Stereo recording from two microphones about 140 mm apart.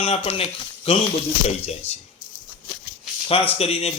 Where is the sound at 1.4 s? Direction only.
50° left (ahead or behind).